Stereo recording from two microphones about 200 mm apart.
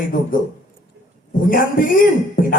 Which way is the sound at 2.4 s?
45° left (ahead or behind).